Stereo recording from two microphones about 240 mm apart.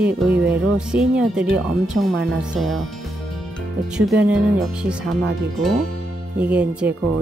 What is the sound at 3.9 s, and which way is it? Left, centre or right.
Speech, centre.